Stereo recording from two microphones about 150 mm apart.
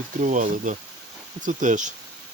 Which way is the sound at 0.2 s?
55° right (ahead or behind).